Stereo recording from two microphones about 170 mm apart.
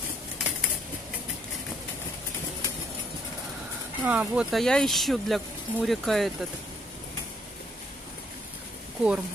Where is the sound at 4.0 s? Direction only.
10° right (ahead or behind).